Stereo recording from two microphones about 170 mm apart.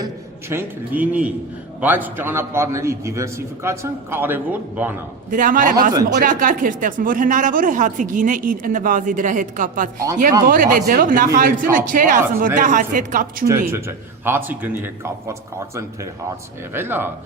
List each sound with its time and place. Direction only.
0.0 s a man's voice: 15° right (ahead or behind)
5.3 s speech: 50° right (ahead or behind)
13.5 s a man's voice: 15° right (ahead or behind)